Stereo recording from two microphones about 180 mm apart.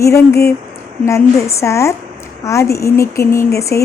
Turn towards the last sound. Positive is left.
turn(degrees=15)  # may be behind; listen again after turning